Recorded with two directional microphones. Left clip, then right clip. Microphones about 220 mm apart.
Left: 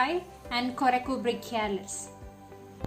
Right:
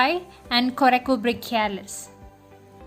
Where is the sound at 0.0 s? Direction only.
45° right (ahead or behind).